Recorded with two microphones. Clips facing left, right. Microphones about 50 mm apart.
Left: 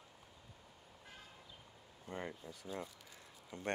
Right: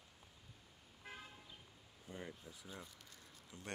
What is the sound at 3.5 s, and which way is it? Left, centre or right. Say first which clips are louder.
Speech: left 9 dB; left.